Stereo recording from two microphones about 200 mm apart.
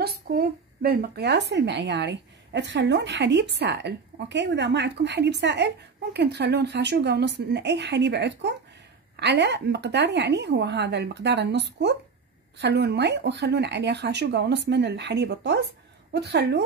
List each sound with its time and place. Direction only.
0.0 s a woman's voice: 50° right (ahead or behind)